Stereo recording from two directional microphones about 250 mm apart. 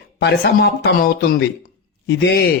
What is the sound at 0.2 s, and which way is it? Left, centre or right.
A man's voice, left.